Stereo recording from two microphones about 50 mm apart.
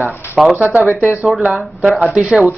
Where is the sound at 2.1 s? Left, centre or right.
Right.